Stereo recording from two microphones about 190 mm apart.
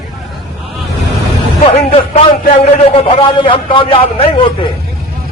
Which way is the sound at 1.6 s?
30° left (ahead or behind).